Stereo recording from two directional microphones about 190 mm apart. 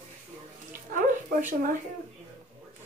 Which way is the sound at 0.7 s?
45° right (ahead or behind).